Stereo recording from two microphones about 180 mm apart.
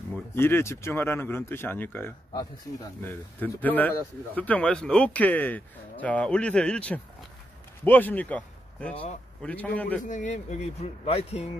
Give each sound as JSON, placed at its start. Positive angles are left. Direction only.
{"t": 0.3, "sound": "speech", "side_deg": 15}
{"t": 10.0, "sound": "speech", "side_deg": 45}